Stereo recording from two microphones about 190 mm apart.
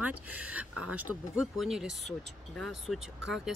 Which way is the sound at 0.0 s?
10° right (ahead or behind).